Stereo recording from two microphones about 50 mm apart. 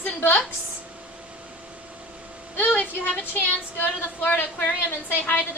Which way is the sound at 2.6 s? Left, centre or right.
Left.